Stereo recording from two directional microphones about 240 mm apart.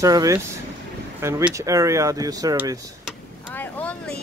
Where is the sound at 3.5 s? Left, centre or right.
Centre.